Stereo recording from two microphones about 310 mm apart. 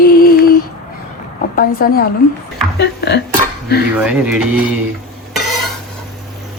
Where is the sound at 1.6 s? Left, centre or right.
Left.